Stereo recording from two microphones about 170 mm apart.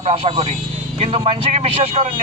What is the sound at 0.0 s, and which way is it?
A man's voice, 35° right (ahead or behind).